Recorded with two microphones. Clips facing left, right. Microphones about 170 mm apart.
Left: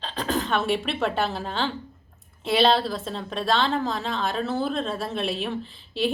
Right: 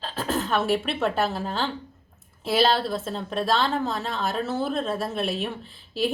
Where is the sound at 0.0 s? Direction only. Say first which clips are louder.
Even; 5° right (ahead or behind).